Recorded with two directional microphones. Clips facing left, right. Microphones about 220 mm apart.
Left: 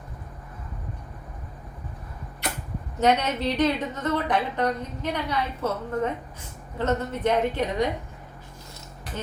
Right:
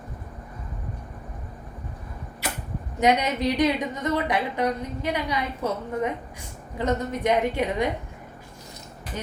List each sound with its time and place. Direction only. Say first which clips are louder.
3.0 s a woman's voice: right 1 dB; 15° right (ahead or behind)